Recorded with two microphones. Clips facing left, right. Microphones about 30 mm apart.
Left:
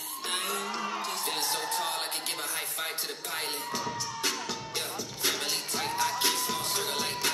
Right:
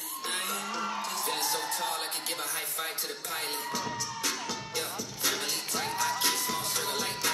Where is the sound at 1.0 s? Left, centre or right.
Left.